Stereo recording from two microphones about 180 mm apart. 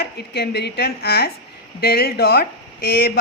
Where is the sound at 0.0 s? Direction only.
65° left (ahead or behind).